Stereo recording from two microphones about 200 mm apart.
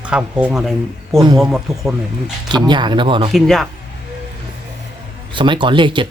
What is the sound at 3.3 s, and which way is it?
Speech, centre (ahead or behind).